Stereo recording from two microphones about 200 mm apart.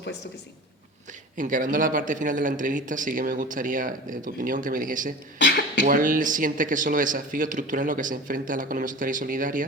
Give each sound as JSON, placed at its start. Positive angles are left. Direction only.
{"t": 1.4, "sound": "a man's voice", "side_deg": -40}
{"t": 5.4, "sound": "beatboxing", "side_deg": 60}
{"t": 5.8, "sound": "a man's voice", "side_deg": -40}